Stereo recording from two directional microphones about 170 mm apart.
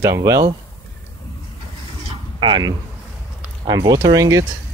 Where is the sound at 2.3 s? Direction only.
25° right (ahead or behind).